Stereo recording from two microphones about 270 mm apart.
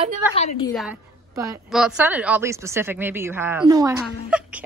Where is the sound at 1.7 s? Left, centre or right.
Centre.